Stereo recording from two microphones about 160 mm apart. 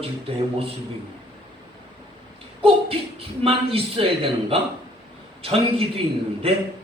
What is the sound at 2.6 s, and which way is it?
Speech, 35° right (ahead or behind).